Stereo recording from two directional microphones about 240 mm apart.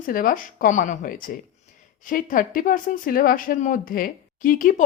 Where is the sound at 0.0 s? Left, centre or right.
Left.